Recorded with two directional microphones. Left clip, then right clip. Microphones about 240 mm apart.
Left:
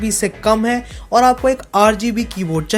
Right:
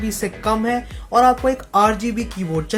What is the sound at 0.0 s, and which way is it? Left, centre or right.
Speech, left.